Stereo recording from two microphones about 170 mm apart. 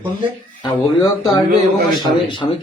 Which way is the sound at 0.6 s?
25° left (ahead or behind).